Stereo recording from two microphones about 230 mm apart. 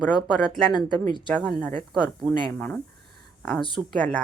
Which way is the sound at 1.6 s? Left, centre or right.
Centre.